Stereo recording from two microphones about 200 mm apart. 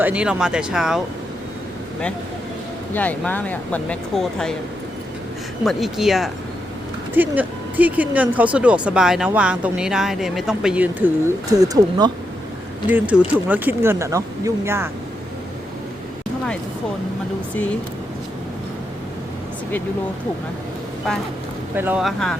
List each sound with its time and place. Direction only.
0.0 s speech: 5° right (ahead or behind)
2.9 s speech: 10° left (ahead or behind)
5.6 s speech: centre (ahead or behind)
11.5 s speech: 15° right (ahead or behind)
12.9 s speech: 5° right (ahead or behind)
21.8 s speech: 5° right (ahead or behind)